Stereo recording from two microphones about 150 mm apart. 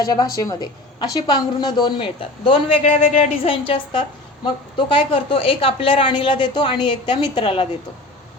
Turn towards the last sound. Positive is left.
turn(degrees=35)  # may be behind; listen again after turning